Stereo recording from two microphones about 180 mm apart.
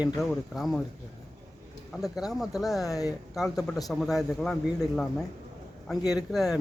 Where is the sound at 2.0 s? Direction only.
Centre (ahead or behind).